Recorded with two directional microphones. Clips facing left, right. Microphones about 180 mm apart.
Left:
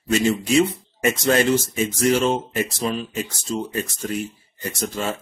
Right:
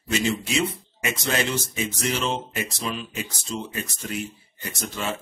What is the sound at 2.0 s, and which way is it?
Speech, 45° left (ahead or behind).